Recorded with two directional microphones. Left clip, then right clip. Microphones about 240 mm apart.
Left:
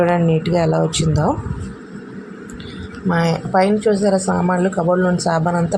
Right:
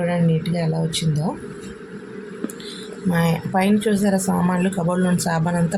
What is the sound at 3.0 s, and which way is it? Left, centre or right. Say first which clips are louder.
Speech: left 4 dB; centre.